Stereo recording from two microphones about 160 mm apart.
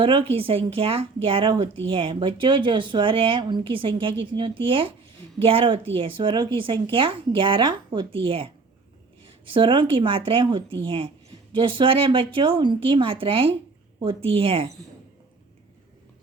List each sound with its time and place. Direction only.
0.0 s speech: 30° right (ahead or behind)